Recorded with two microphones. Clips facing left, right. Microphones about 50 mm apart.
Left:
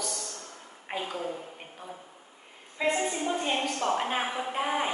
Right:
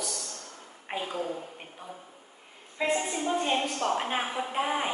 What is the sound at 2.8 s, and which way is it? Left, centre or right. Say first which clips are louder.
A woman's voice: left 1 dB; centre.